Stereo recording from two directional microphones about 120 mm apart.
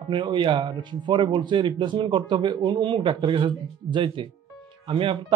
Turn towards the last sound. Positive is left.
turn(degrees=-50)  # may be behind; listen again after turning